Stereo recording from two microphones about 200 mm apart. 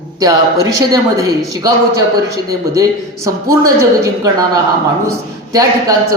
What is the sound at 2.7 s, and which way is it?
A woman's voice, 15° right (ahead or behind).